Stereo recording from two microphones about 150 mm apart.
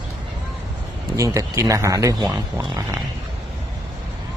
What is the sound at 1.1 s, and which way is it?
Speech, 20° right (ahead or behind).